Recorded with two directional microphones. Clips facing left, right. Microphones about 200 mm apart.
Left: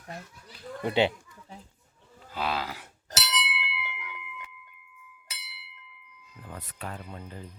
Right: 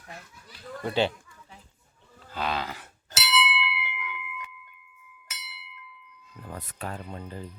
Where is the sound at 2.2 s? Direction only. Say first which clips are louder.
Right 1 dB; 5° left (ahead or behind).